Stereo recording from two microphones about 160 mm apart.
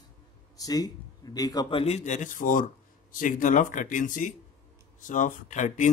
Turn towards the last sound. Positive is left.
turn(degrees=50)  # may be behind; listen again after turning